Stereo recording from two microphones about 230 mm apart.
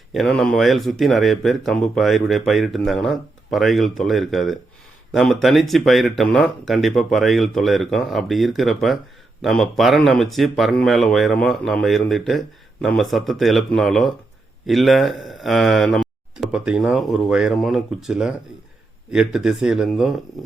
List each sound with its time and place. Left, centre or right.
0.1 s speech: centre